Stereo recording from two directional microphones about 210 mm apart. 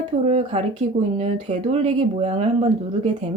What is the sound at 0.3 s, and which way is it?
Speech, 30° right (ahead or behind).